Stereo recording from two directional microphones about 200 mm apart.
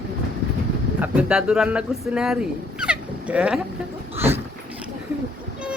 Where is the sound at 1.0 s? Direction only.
5° right (ahead or behind).